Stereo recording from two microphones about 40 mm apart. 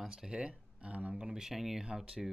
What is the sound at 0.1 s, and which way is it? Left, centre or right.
Speech, right.